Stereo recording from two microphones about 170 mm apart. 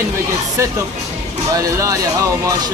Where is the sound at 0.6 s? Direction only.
15° right (ahead or behind).